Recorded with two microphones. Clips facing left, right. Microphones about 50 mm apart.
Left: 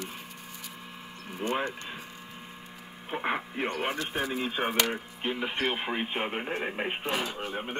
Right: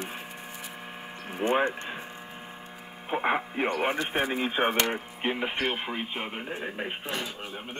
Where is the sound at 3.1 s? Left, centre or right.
Right.